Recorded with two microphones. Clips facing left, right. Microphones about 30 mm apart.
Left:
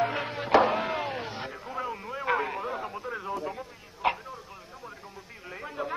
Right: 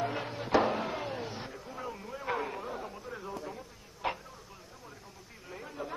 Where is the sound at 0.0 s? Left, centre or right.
Left.